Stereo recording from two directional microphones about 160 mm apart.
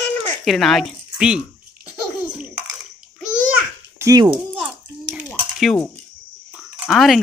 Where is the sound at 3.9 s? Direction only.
20° right (ahead or behind).